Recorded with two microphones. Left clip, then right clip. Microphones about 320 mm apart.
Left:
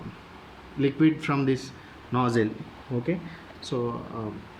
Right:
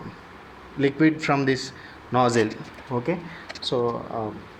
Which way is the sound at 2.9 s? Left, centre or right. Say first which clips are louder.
Right 4 dB; right.